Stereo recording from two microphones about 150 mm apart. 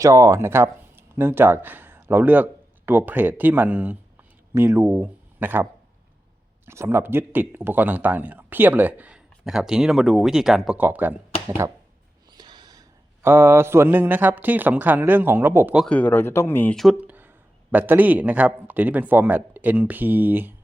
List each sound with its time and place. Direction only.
0.0 s speech: 20° right (ahead or behind)
6.7 s speech: 15° right (ahead or behind)
12.3 s snort: 30° right (ahead or behind)
13.2 s speech: 15° right (ahead or behind)
15.9 s speech: 10° left (ahead or behind)
16.7 s speech: centre (ahead or behind)